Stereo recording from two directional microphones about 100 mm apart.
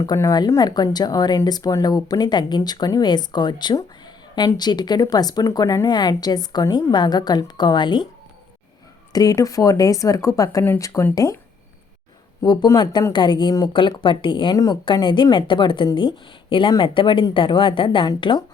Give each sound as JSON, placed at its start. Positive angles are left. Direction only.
{"t": 0.0, "sound": "speech", "side_deg": 35}
{"t": 9.1, "sound": "speech", "side_deg": 35}
{"t": 12.4, "sound": "speech", "side_deg": 40}
{"t": 13.7, "sound": "speech", "side_deg": 55}
{"t": 14.5, "sound": "speech", "side_deg": 40}